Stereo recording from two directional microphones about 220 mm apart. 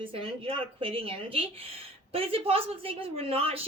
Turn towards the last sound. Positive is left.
turn(degrees=-25)  # may be behind; listen again after turning